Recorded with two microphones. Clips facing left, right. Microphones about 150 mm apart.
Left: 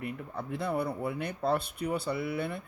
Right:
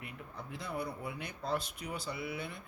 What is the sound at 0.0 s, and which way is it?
Speech, 60° left (ahead or behind).